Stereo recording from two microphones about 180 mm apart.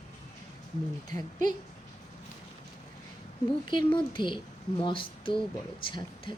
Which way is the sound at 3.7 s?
25° left (ahead or behind).